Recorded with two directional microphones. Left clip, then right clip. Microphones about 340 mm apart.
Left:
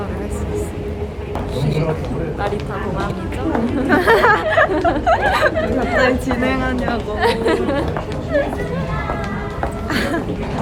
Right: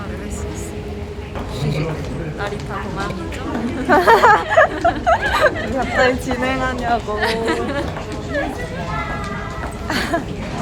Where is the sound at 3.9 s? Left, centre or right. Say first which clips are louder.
Right 2 dB; centre.